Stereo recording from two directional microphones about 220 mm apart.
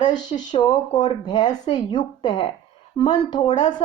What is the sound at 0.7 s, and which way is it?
Speech, 35° left (ahead or behind).